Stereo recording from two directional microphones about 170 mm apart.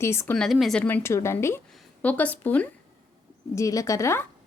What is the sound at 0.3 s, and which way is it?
A woman's voice, centre (ahead or behind).